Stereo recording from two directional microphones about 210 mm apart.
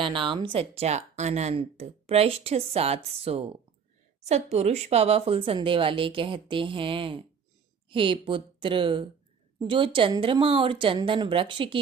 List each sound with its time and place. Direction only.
0.0 s a woman's voice: 25° right (ahead or behind)